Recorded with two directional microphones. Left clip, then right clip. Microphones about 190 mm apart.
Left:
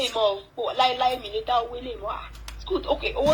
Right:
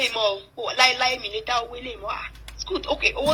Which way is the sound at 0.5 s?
45° right (ahead or behind).